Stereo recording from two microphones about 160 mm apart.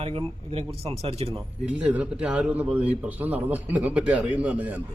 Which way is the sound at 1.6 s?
10° right (ahead or behind).